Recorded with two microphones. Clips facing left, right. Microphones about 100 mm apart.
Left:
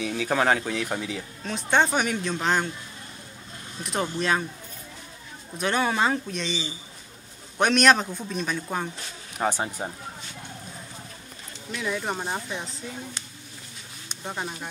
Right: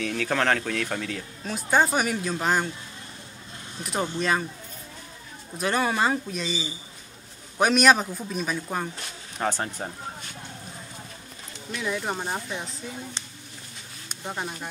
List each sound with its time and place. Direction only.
0.0 s speech: 10° left (ahead or behind)
1.4 s speech: 5° right (ahead or behind)
3.8 s speech: centre (ahead or behind)
5.6 s speech: centre (ahead or behind)
9.4 s speech: 10° left (ahead or behind)
11.7 s speech: centre (ahead or behind)